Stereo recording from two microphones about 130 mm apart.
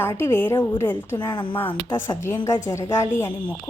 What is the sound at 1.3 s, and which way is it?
Speech, 40° left (ahead or behind).